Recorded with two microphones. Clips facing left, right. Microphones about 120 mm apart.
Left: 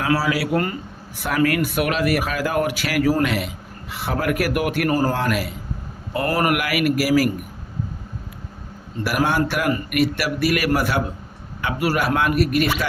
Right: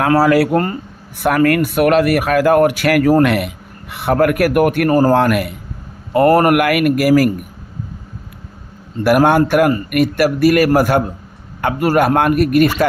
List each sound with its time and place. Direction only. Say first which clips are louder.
0.0 s speech: right 9 dB; 55° right (ahead or behind)
5.1 s a man's voice: right 9 dB; 60° right (ahead or behind)
9.0 s a man's voice: right 9 dB; 50° right (ahead or behind)